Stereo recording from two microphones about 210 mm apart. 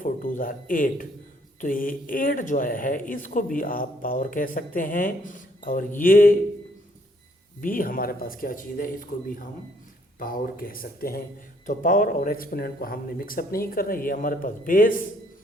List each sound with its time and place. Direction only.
0.0 s speech: 40° left (ahead or behind)
7.6 s speech: 40° left (ahead or behind)